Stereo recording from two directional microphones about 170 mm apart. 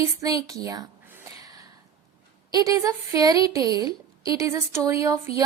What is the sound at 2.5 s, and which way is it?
A woman's voice, 20° right (ahead or behind).